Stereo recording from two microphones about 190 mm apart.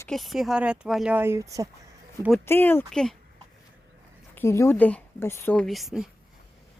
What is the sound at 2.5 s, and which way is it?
Speech, 10° left (ahead or behind).